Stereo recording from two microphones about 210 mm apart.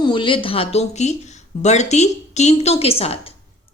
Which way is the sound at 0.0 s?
20° left (ahead or behind).